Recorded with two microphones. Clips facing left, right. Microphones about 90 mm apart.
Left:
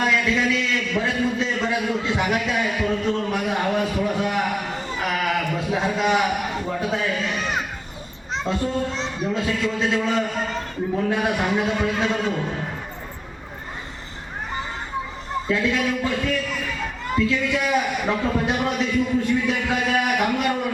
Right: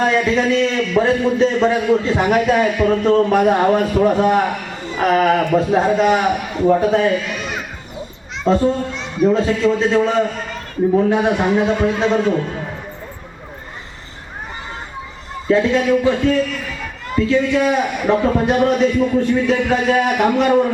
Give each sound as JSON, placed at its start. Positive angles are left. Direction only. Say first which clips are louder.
{"t": 0.0, "sound": "a man's voice", "louder": "right 5 dB", "side_deg": -35}
{"t": 8.4, "sound": "a man's voice", "louder": "right 9 dB", "side_deg": -35}
{"t": 15.4, "sound": "a man's voice", "louder": "right 9 dB", "side_deg": -35}